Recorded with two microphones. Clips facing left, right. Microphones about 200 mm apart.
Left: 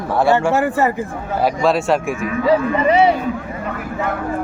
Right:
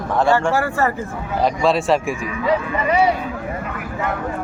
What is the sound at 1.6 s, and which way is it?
Speech, centre (ahead or behind).